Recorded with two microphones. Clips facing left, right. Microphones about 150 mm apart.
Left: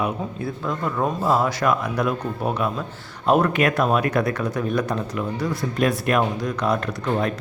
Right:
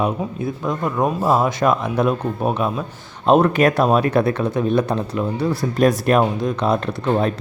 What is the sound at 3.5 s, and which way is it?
Speech, 35° right (ahead or behind).